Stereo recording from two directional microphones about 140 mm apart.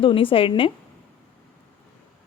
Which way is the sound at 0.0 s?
40° left (ahead or behind).